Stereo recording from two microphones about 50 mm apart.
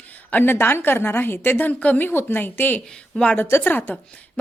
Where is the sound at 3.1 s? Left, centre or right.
Left.